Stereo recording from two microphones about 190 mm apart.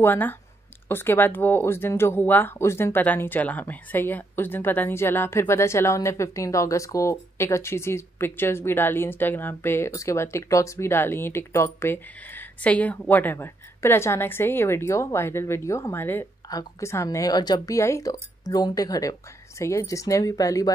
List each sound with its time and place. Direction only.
0.0 s speech: 10° left (ahead or behind)